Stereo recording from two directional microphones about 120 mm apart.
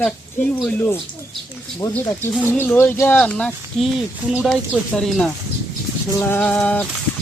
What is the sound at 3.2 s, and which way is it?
Speech, 5° left (ahead or behind).